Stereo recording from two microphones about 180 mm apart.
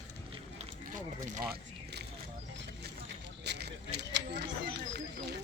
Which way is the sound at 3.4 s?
70° right (ahead or behind).